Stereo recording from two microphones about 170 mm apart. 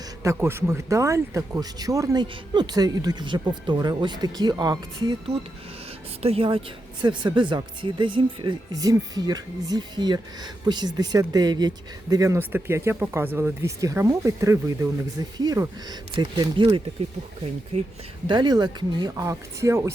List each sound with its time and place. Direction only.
0.2 s a woman's voice: 15° right (ahead or behind)
17.7 s a woman's voice: 40° right (ahead or behind)
18.3 s speech: 25° right (ahead or behind)